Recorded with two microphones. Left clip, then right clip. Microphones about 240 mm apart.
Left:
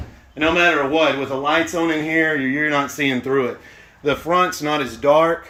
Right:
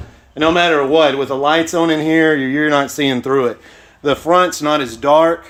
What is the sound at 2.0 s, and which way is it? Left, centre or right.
Speech, right.